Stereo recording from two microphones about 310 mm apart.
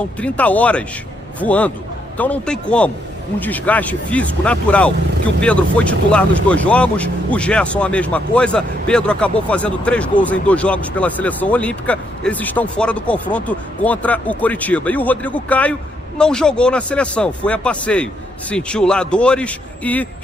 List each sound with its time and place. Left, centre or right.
0.2 s speech: centre